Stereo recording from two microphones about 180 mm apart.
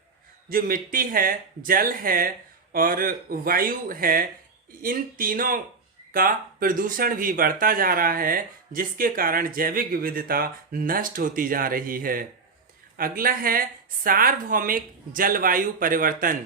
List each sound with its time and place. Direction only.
0.4 s speech: 55° right (ahead or behind)